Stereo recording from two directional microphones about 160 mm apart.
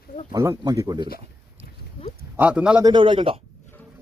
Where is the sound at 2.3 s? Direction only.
10° right (ahead or behind).